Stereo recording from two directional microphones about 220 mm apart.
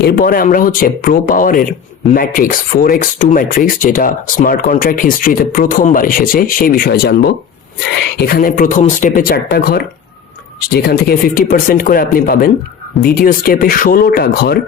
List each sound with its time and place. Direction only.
0.0 s speech: 45° left (ahead or behind)